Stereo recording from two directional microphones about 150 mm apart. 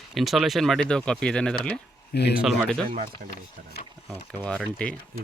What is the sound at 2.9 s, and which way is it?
Speech, 75° right (ahead or behind).